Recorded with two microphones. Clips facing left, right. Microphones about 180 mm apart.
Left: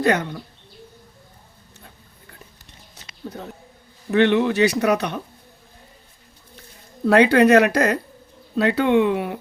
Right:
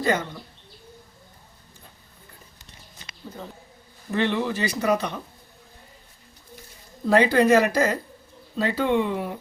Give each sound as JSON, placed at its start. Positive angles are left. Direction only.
{"t": 0.0, "sound": "speech", "side_deg": 70}
{"t": 4.1, "sound": "speech", "side_deg": 70}
{"t": 7.1, "sound": "speech", "side_deg": 70}